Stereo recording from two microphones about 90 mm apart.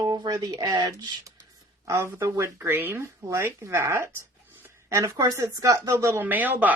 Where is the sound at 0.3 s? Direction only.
40° right (ahead or behind).